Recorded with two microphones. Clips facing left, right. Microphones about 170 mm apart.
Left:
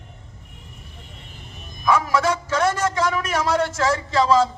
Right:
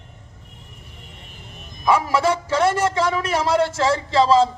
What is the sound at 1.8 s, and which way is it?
A man's voice, 30° right (ahead or behind).